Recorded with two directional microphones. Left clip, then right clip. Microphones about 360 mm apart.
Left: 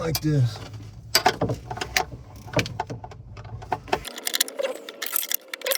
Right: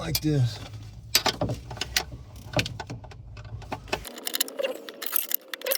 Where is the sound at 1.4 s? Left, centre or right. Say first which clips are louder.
Left 4 dB; centre.